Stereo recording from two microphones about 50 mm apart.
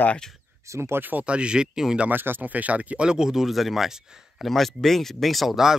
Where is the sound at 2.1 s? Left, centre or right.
Right; by 5.8 s centre.